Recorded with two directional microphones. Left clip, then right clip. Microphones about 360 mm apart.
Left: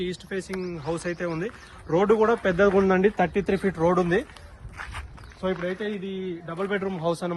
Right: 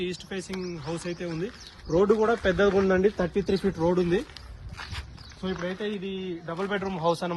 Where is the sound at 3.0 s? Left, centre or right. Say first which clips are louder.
Left 3 dB; left.